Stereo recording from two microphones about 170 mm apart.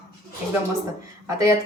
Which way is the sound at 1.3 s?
20° right (ahead or behind).